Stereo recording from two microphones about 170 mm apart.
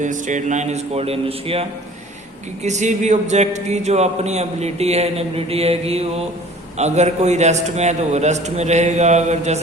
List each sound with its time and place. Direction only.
0.0 s a man's voice: 50° right (ahead or behind)
2.6 s a man's voice: 45° right (ahead or behind)